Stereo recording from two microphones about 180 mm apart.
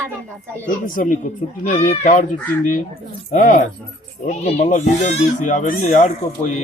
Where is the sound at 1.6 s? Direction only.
40° left (ahead or behind).